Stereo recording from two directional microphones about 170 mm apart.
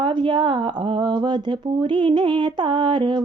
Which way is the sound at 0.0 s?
30° right (ahead or behind).